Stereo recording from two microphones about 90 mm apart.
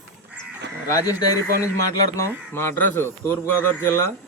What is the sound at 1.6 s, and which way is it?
Speech, 35° left (ahead or behind).